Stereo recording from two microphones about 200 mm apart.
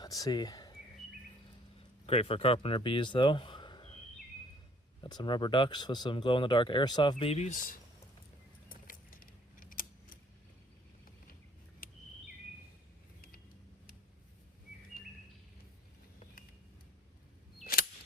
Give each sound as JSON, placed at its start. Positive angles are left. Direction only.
{"t": 0.0, "sound": "a sound", "side_deg": 20}
{"t": 2.0, "sound": "speech", "side_deg": 30}
{"t": 5.0, "sound": "speech", "side_deg": 20}
{"t": 8.7, "sound": "keys jangling", "side_deg": 45}
{"t": 17.6, "sound": "camera", "side_deg": 50}